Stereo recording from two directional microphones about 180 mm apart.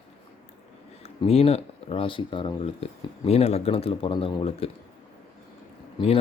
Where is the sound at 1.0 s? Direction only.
35° left (ahead or behind).